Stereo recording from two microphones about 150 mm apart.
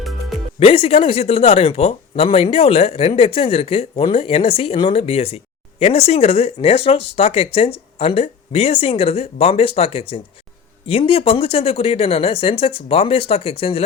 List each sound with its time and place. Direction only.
0.6 s speech: 40° left (ahead or behind)